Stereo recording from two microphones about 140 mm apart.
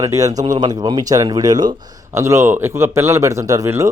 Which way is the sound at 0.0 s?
20° right (ahead or behind).